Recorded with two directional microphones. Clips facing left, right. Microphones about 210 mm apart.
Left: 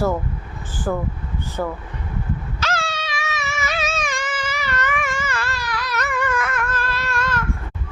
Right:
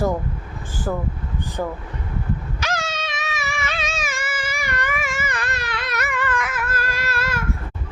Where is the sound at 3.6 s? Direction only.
5° left (ahead or behind).